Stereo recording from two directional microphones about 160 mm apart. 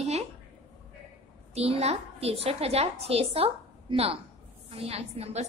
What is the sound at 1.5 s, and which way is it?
A woman's voice, 40° right (ahead or behind).